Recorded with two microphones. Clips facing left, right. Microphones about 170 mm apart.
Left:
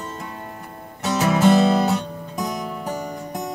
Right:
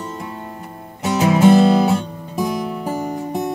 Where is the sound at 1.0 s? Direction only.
15° right (ahead or behind).